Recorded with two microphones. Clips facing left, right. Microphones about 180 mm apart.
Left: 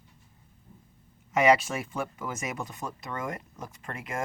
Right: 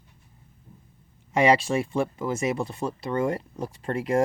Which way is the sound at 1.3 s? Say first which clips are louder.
Right 2 dB; 30° right (ahead or behind).